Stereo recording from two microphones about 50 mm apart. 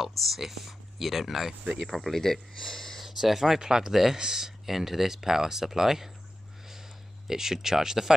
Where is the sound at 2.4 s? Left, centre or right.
Centre.